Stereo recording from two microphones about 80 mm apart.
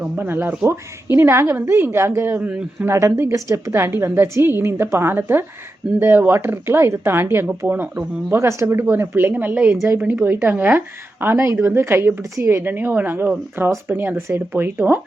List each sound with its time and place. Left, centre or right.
0.2 s a woman's voice: right
2.5 s speech: centre
2.8 s a woman's voice: right
8.4 s a woman's voice: right